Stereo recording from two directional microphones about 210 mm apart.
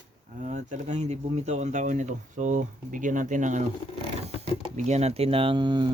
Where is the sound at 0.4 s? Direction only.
35° right (ahead or behind).